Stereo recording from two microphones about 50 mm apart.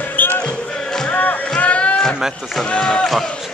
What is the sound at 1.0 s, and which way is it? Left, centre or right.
Music, left.